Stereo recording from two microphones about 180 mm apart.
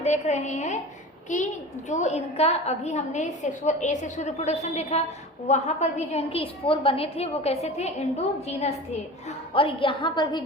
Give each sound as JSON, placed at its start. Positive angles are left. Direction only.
{"t": 0.0, "sound": "a woman's voice", "side_deg": 40}